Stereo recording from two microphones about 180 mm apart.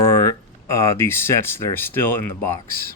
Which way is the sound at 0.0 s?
15° left (ahead or behind).